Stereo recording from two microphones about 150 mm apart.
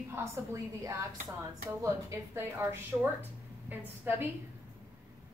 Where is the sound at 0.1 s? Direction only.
20° right (ahead or behind).